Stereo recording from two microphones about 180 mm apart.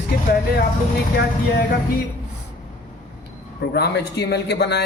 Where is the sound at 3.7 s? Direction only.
65° left (ahead or behind).